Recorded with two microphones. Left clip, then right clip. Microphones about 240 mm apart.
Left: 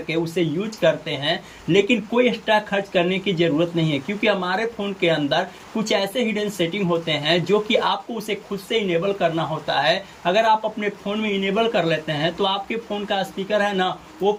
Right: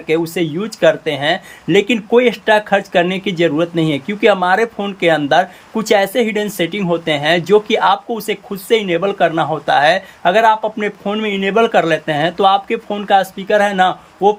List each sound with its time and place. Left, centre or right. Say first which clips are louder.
0.3 s speech: right 5 dB; centre